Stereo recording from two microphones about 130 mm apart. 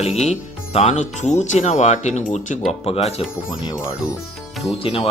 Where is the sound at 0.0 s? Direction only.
55° left (ahead or behind).